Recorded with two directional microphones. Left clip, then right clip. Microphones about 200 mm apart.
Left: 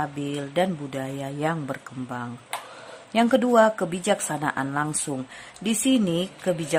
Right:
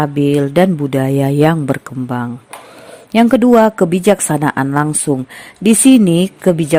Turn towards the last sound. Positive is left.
turn(degrees=-40)  # may be behind; listen again after turning